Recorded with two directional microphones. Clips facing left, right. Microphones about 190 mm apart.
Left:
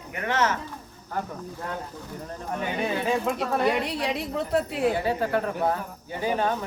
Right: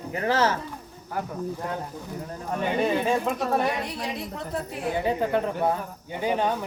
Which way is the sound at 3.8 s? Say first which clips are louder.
Left 4 dB; 70° left (ahead or behind).